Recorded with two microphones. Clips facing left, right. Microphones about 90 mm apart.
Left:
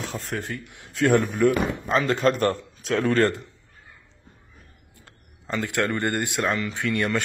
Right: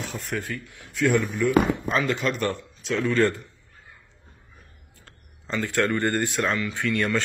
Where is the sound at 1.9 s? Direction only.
35° left (ahead or behind).